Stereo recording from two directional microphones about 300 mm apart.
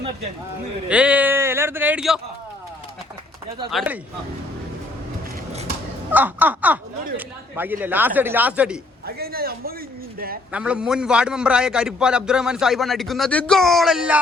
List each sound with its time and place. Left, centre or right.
0.9 s a man's voice: centre
3.7 s a man's voice: centre
6.1 s a man's voice: centre
9.0 s a man's voice: right
10.5 s a man's voice: centre